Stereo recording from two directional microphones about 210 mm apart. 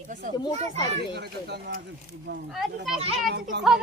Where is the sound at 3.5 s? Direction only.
55° right (ahead or behind).